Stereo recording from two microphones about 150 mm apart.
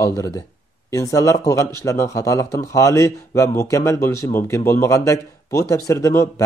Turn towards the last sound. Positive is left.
turn(degrees=20)  # may be behind; listen again after turning